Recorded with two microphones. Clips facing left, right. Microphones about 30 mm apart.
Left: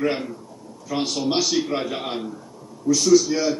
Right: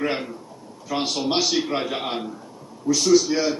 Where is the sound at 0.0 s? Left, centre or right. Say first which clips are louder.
Left 2 dB; centre.